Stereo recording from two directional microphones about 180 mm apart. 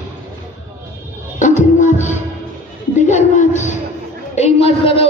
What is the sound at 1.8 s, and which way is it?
Music, 40° left (ahead or behind).